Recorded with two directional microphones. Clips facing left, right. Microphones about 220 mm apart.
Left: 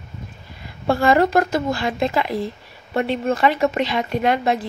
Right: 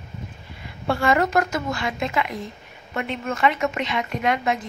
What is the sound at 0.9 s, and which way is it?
A woman's voice, 35° left (ahead or behind).